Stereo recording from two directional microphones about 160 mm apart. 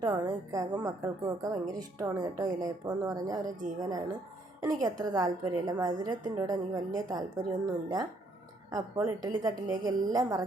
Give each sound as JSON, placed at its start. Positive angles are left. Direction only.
{"t": 0.0, "sound": "a woman's voice", "side_deg": -25}